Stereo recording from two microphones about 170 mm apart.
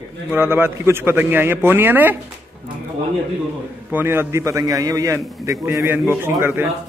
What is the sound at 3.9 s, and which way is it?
A man's voice, 10° right (ahead or behind).